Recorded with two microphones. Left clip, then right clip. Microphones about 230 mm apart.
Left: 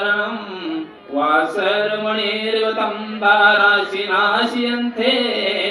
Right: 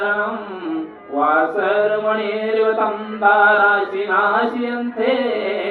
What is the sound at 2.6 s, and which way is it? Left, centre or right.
Chant, left.